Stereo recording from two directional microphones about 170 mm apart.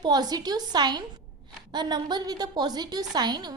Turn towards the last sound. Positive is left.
turn(degrees=-25)  # may be behind; listen again after turning